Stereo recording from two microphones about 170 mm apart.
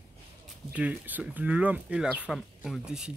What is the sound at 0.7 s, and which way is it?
Speech, 10° right (ahead or behind).